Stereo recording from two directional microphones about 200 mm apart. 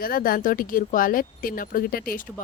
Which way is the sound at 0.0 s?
45° left (ahead or behind).